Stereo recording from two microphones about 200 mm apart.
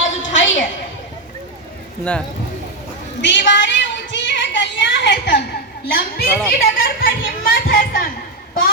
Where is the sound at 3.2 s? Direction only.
60° left (ahead or behind).